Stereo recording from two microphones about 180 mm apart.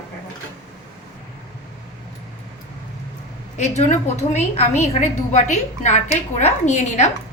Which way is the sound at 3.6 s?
40° left (ahead or behind).